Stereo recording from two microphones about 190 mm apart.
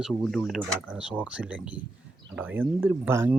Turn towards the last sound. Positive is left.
turn(degrees=-10)  # may be behind; listen again after turning